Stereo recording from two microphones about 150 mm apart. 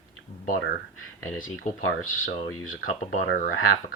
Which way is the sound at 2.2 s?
65° left (ahead or behind).